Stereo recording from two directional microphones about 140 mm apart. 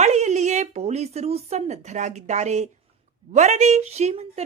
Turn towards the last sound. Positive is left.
turn(degrees=-50)  # may be behind; listen again after turning